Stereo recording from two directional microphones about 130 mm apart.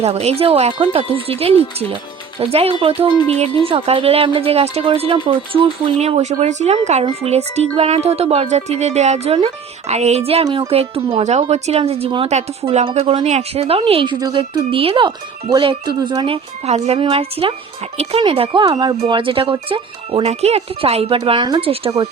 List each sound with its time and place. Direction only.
0.0 s a woman's voice: 55° right (ahead or behind)
6.0 s a woman's voice: 55° right (ahead or behind)
10.4 s speech: 30° right (ahead or behind)
10.7 s a woman's voice: 45° right (ahead or behind)
11.2 s a woman's voice: 60° right (ahead or behind); by 16.4 s 40° right (ahead or behind)
16.6 s a woman's voice: 55° right (ahead or behind)
18.6 s a woman's voice: 30° right (ahead or behind)